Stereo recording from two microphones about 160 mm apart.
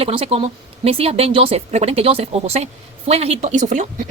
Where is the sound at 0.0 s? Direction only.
35° right (ahead or behind).